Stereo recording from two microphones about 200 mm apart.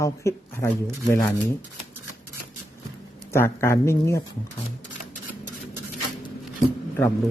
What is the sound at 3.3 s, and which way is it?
Speech, 15° left (ahead or behind).